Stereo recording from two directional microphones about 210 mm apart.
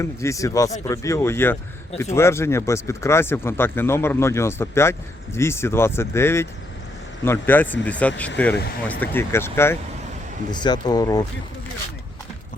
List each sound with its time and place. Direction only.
0.0 s speech: 15° left (ahead or behind)